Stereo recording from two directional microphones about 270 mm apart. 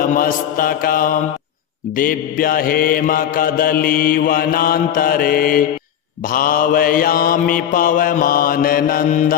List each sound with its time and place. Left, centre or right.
0.1 s mantra: left